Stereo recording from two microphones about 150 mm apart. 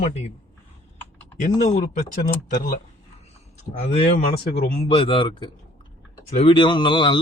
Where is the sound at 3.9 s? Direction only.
45° left (ahead or behind).